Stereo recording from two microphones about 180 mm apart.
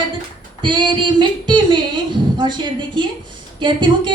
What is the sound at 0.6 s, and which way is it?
Female singing, 25° right (ahead or behind).